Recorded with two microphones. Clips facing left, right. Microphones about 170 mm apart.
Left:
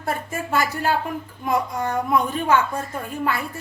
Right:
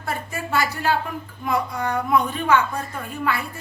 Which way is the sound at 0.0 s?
45° left (ahead or behind).